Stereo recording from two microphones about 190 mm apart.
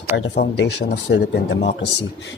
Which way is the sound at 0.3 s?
65° left (ahead or behind).